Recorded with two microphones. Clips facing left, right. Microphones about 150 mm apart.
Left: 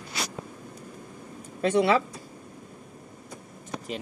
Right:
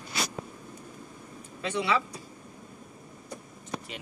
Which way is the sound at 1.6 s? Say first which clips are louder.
Left 7 dB; 50° left (ahead or behind).